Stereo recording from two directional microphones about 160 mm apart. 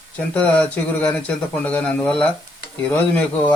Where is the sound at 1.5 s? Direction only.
10° left (ahead or behind).